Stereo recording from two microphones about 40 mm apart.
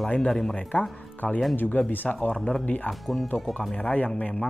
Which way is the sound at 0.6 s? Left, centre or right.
Left.